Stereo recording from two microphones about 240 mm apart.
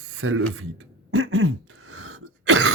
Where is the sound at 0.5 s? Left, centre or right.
Right.